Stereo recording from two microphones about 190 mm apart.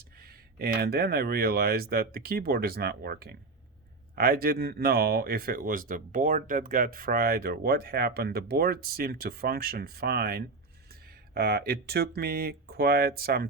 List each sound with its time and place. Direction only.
0.2 s speech: 55° right (ahead or behind)